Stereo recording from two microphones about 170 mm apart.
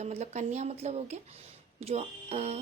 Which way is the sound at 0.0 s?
40° right (ahead or behind).